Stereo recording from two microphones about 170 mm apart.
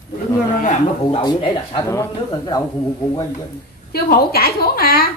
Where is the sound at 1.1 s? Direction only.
30° left (ahead or behind).